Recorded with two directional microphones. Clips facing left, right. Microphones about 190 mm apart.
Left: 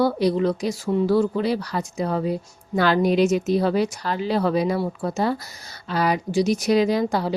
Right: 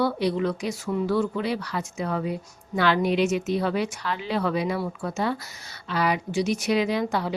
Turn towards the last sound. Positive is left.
turn(degrees=40)  # may be behind; listen again after turning